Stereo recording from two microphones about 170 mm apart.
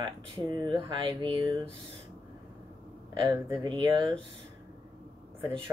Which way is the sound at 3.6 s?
25° right (ahead or behind).